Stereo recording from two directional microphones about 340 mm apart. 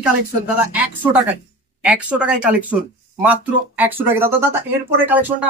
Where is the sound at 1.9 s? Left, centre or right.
Centre.